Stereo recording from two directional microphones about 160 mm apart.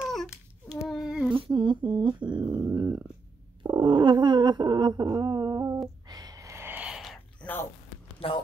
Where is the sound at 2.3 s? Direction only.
30° right (ahead or behind).